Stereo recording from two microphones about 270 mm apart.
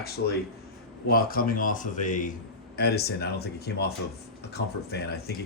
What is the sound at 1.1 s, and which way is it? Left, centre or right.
Speech, left.